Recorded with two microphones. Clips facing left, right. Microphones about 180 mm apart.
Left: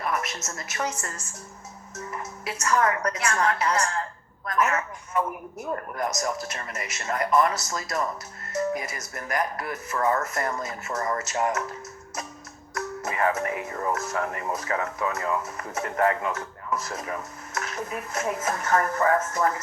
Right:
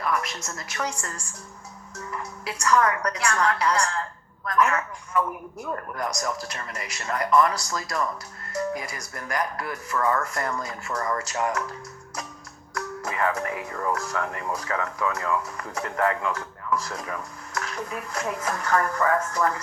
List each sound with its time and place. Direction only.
0.0 s speech: 25° left (ahead or behind)
2.0 s music: 20° left (ahead or behind)
3.1 s speech: 25° left (ahead or behind)
12.7 s music: 25° left (ahead or behind)
13.3 s speech: 20° left (ahead or behind)